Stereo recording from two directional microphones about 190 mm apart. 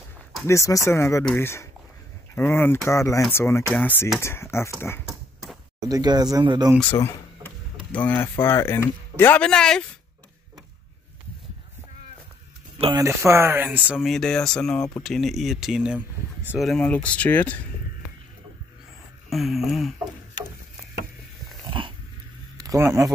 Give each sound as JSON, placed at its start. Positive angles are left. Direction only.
{"t": 0.5, "sound": "speech", "side_deg": 15}
{"t": 5.0, "sound": "a sound", "side_deg": 0}
{"t": 5.9, "sound": "speech", "side_deg": -20}
{"t": 6.8, "sound": "speech", "side_deg": 10}
{"t": 12.8, "sound": "speech", "side_deg": -15}
{"t": 19.2, "sound": "speech", "side_deg": 0}
{"t": 21.6, "sound": "dog", "side_deg": -25}
{"t": 22.6, "sound": "speech", "side_deg": -15}